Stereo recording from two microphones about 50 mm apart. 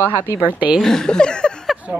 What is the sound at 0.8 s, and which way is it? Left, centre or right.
Speech, centre.